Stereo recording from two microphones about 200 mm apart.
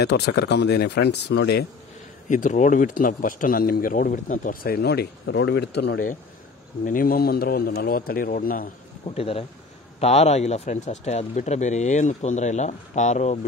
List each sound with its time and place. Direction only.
0.0 s speech: 55° left (ahead or behind)
2.2 s a man's voice: 40° left (ahead or behind); by 6.0 s 55° left (ahead or behind)
6.8 s a man's voice: 45° left (ahead or behind)
9.0 s speech: 30° left (ahead or behind)